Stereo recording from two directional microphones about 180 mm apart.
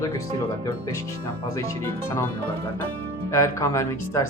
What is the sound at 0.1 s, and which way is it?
Speech, 25° left (ahead or behind).